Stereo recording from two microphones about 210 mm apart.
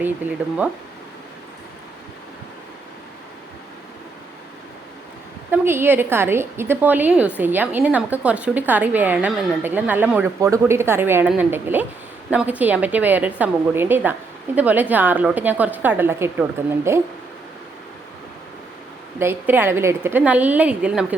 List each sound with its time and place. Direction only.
5.5 s a woman's voice: 10° right (ahead or behind)
19.2 s a woman's voice: 10° right (ahead or behind)